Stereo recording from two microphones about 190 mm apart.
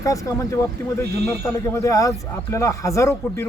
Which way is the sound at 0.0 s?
15° left (ahead or behind).